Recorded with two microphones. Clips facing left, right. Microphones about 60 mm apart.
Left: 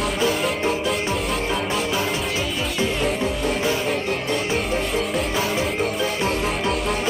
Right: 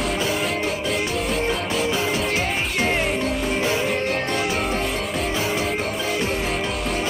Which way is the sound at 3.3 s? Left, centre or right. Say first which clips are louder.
Even; centre.